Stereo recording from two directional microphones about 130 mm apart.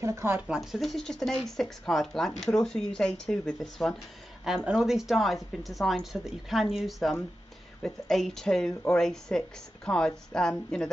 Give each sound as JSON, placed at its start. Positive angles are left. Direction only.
{"t": 0.0, "sound": "speech", "side_deg": -20}
{"t": 0.5, "sound": "speech", "side_deg": 0}